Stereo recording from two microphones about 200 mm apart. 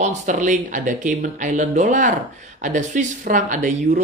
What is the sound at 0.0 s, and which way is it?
Speech, 40° right (ahead or behind).